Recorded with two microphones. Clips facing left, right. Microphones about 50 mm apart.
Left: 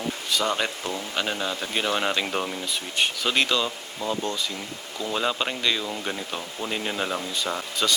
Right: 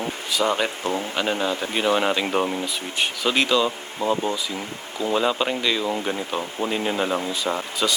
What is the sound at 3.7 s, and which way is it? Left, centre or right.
Speech, right.